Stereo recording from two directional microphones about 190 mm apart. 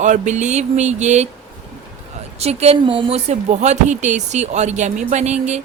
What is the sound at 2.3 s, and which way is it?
Speech, 35° right (ahead or behind).